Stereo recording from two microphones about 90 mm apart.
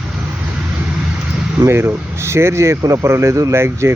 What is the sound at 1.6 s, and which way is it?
Speech, 30° right (ahead or behind).